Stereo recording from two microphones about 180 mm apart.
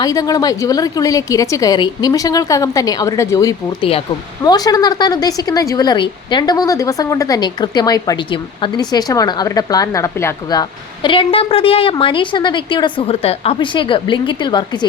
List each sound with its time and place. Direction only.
0.0 s speech: 20° left (ahead or behind)
3.8 s speech: 30° left (ahead or behind)
4.4 s speech: 20° left (ahead or behind)